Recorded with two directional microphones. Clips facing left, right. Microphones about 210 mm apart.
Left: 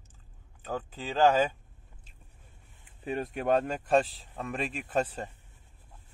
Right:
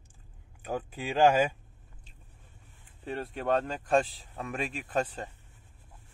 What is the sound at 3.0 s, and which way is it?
Speech, 15° left (ahead or behind).